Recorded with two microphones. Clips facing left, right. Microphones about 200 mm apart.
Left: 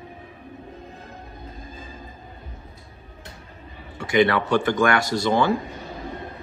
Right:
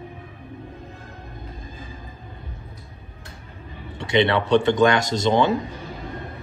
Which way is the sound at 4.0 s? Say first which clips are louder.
Even; 25° right (ahead or behind).